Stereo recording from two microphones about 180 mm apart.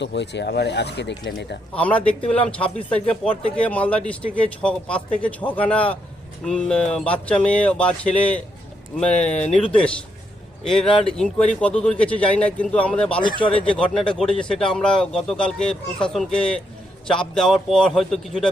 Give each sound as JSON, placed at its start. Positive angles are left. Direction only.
{"t": 0.0, "sound": "speech", "side_deg": 75}
{"t": 1.7, "sound": "a man's voice", "side_deg": 5}
{"t": 9.1, "sound": "speech", "side_deg": 40}
{"t": 9.4, "sound": "speech", "side_deg": 5}
{"t": 10.7, "sound": "speech", "side_deg": 0}